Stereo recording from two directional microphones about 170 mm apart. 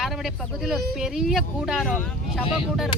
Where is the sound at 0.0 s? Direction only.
Centre (ahead or behind).